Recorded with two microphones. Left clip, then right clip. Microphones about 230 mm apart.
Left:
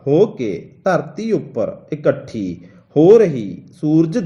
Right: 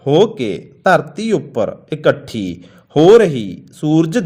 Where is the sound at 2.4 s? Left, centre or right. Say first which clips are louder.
Right 1 dB; right.